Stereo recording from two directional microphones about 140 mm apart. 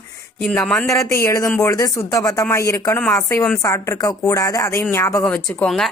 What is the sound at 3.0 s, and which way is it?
Speech, 10° left (ahead or behind).